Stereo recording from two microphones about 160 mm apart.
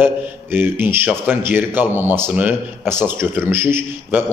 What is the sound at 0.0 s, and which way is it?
A man's voice, 10° right (ahead or behind).